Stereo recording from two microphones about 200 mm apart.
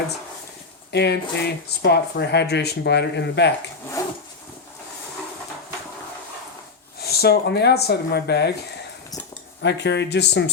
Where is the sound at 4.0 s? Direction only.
15° left (ahead or behind).